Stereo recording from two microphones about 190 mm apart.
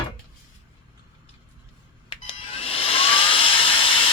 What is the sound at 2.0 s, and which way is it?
Hair dryer, 25° left (ahead or behind).